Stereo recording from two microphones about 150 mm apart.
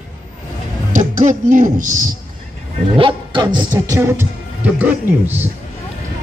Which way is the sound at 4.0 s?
15° right (ahead or behind).